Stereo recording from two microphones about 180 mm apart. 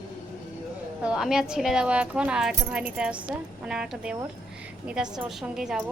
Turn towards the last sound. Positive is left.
turn(degrees=-5)  # may be behind; listen again after turning